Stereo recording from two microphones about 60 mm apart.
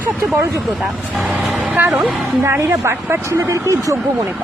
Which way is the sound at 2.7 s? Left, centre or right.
Right.